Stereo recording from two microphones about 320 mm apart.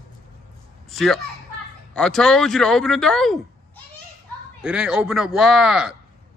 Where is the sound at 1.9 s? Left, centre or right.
Centre.